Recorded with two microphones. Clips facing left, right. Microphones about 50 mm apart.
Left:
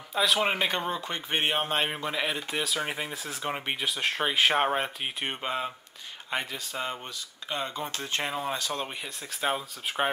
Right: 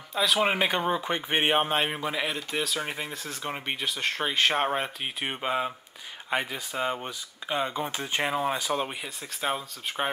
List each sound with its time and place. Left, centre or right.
0.1 s speech: centre
1.7 s speech: centre
8.8 s speech: centre